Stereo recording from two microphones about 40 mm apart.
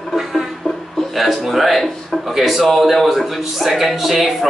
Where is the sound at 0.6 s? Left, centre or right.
Left.